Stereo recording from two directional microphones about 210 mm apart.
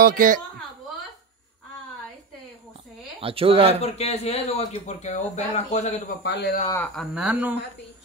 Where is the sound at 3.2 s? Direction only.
25° right (ahead or behind).